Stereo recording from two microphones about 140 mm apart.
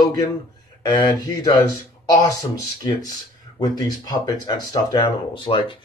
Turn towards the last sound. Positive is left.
turn(degrees=40)  # may be behind; listen again after turning